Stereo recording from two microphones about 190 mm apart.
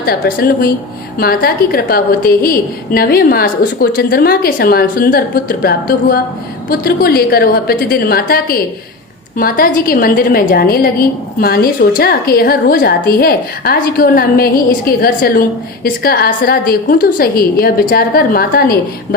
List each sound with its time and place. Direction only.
0.0 s a woman's voice: 50° left (ahead or behind)